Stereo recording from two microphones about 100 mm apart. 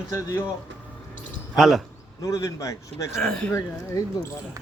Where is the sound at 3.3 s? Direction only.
10° left (ahead or behind).